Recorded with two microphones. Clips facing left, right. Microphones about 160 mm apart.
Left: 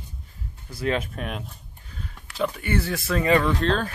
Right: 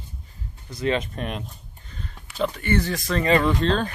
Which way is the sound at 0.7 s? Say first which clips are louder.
Right 2 dB; 5° left (ahead or behind).